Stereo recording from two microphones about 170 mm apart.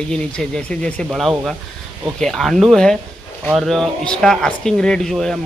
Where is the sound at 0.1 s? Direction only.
5° left (ahead or behind).